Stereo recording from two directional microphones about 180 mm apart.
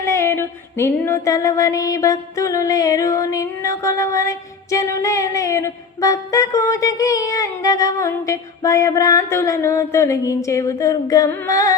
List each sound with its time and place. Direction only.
0.0 s female singing: 15° left (ahead or behind)